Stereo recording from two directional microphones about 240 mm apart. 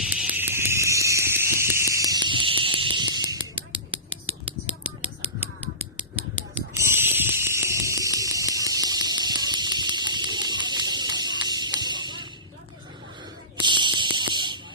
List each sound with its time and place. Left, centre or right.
0.1 s fire alarm: centre
4.4 s finger snapping: centre
6.0 s fire alarm: centre
11.8 s music: centre
13.6 s fire alarm: centre